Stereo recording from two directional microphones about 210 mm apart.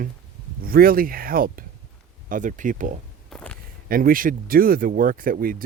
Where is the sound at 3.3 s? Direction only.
5° left (ahead or behind).